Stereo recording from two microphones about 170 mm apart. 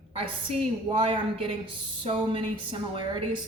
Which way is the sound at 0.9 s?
30° right (ahead or behind).